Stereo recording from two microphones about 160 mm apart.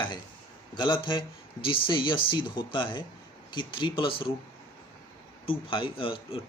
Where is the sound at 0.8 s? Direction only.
30° left (ahead or behind).